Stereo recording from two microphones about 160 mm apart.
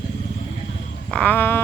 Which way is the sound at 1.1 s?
10° left (ahead or behind).